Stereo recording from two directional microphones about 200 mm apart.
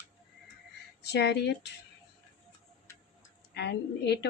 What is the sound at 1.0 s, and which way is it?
Speech, 55° left (ahead or behind).